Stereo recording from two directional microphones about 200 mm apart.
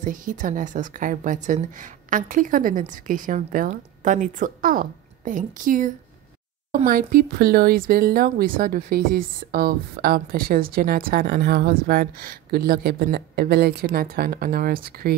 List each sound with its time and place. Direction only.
0.0 s a woman's voice: 40° right (ahead or behind)